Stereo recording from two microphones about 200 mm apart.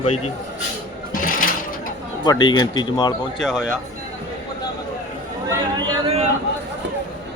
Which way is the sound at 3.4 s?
5° right (ahead or behind).